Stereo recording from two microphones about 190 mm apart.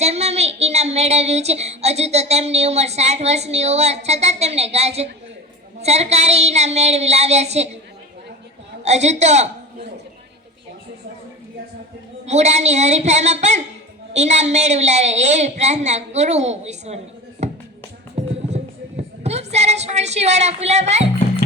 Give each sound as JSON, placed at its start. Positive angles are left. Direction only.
{"t": 0.0, "sound": "child singing", "side_deg": -35}
{"t": 8.8, "sound": "a woman's voice", "side_deg": -35}
{"t": 12.2, "sound": "child singing", "side_deg": -35}
{"t": 17.4, "sound": "music", "side_deg": -35}
{"t": 19.2, "sound": "speech", "side_deg": -35}